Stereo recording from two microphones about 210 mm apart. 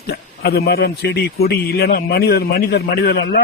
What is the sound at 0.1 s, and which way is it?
Speech, 50° left (ahead or behind).